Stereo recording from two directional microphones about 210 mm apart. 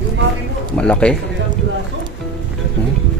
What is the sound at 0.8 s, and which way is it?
Speech, 5° left (ahead or behind).